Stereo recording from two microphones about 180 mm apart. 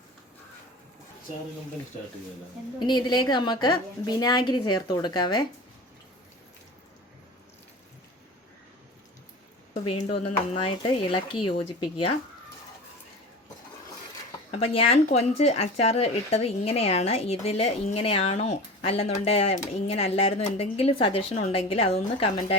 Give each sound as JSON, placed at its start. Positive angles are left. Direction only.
{"t": 2.7, "sound": "a woman's voice", "side_deg": 25}
{"t": 10.6, "sound": "a woman's voice", "side_deg": 30}
{"t": 14.5, "sound": "speech", "side_deg": 35}